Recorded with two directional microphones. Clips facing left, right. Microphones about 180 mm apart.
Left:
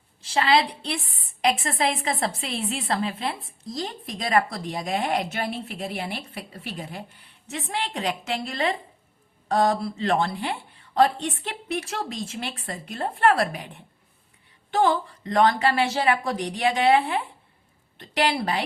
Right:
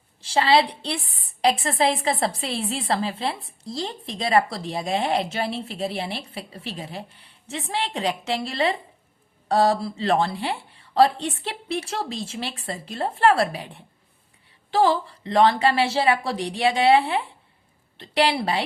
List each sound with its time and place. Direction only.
0.2 s a woman's voice: 30° right (ahead or behind)